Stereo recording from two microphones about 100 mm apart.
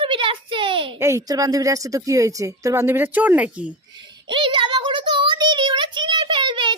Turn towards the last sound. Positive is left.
turn(degrees=-50)  # may be behind; listen again after turning